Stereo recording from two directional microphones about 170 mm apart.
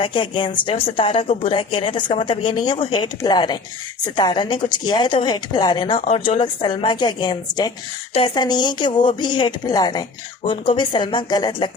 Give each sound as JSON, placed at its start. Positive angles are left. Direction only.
{"t": 0.0, "sound": "a woman's voice", "side_deg": 30}